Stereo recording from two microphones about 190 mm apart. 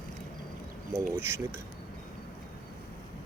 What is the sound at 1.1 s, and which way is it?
Speech, 15° right (ahead or behind).